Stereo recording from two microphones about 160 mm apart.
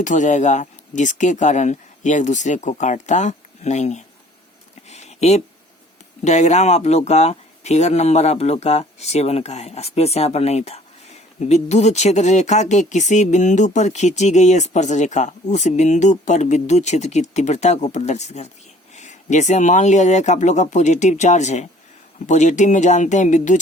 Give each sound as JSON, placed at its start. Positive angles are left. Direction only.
{"t": 0.0, "sound": "speech", "side_deg": 50}
{"t": 4.9, "sound": "a sound", "side_deg": 45}
{"t": 6.2, "sound": "speech", "side_deg": 45}